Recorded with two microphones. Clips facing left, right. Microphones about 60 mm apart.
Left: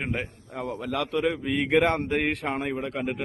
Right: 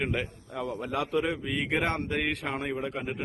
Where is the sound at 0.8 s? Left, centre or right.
Left.